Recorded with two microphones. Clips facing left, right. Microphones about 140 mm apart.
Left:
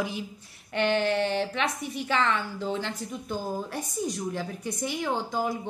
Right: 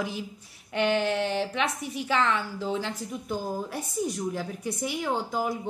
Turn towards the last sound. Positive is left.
turn(degrees=-5)  # may be behind; listen again after turning